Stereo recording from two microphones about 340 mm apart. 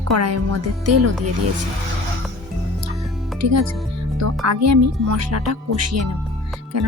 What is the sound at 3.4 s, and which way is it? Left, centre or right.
Speech, right.